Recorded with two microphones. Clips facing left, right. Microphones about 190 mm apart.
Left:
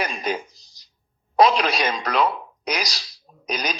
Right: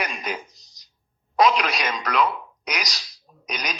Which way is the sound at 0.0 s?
30° left (ahead or behind).